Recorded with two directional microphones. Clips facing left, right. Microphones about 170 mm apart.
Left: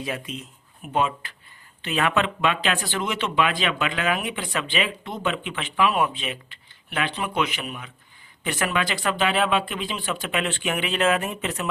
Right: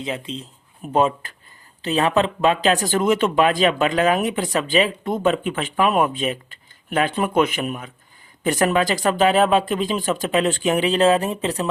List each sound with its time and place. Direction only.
0.0 s speech: 25° right (ahead or behind)